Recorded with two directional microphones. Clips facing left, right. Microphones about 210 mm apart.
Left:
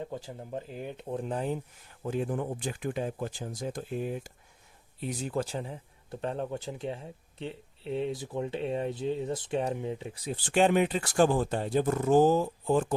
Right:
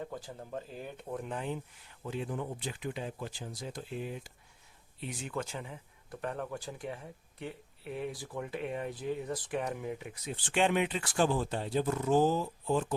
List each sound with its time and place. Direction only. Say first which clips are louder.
0.0 s a man's voice: left 3 dB; 20° left (ahead or behind); by 12.9 s 50° left (ahead or behind)